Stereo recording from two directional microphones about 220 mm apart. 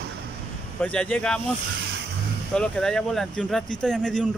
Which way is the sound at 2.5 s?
5° left (ahead or behind).